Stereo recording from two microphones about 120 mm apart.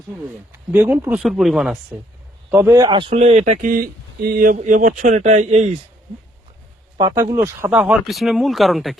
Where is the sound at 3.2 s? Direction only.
70° right (ahead or behind).